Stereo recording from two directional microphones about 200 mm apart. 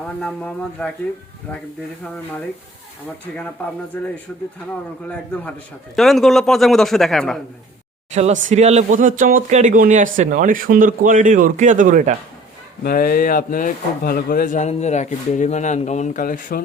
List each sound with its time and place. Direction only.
0.2 s a man's voice: 5° left (ahead or behind)
3.3 s speech: 10° left (ahead or behind)
6.0 s a man's voice: centre (ahead or behind)
8.1 s speech: 35° right (ahead or behind)
12.8 s speech: 45° left (ahead or behind)